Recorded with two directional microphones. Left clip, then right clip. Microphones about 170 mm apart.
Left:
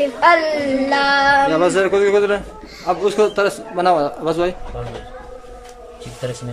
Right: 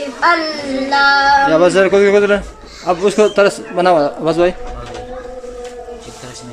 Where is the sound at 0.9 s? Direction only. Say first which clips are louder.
Right 5 dB; 20° left (ahead or behind).